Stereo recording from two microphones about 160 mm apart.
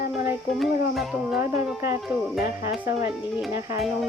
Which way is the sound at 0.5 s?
Centre (ahead or behind).